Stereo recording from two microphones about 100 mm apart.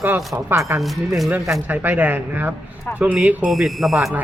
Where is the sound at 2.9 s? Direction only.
25° left (ahead or behind).